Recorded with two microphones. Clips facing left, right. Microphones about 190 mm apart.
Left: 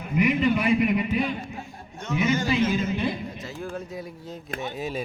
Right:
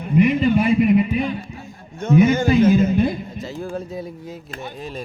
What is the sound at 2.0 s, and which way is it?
Speech, 50° right (ahead or behind).